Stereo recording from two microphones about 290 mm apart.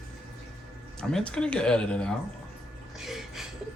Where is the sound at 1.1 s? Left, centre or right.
Centre.